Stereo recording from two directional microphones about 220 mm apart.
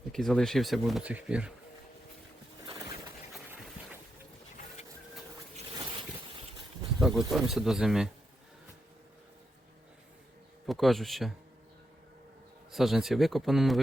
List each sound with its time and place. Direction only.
0.1 s speech: centre (ahead or behind)
2.6 s a sound: 20° right (ahead or behind)
7.0 s speech: centre (ahead or behind)
10.7 s speech: centre (ahead or behind)
12.7 s speech: centre (ahead or behind)